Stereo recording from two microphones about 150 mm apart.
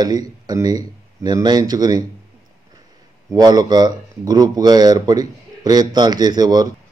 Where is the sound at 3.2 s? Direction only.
25° right (ahead or behind).